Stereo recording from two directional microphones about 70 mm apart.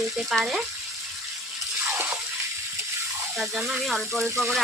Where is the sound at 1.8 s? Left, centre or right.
Right.